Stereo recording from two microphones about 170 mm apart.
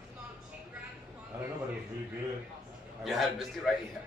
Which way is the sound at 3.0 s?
Centre (ahead or behind).